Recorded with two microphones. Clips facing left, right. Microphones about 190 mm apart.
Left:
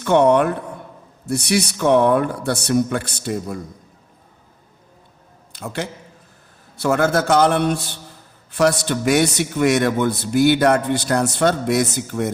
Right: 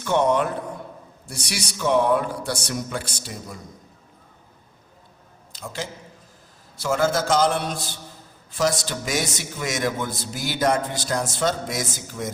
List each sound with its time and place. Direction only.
0.0 s a man's voice: 65° left (ahead or behind)
5.5 s a man's voice: 60° left (ahead or behind)